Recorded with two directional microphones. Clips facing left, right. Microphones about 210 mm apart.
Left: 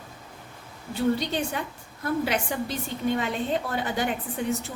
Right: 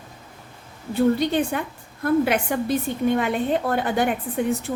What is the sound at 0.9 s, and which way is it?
A woman's voice, 55° right (ahead or behind).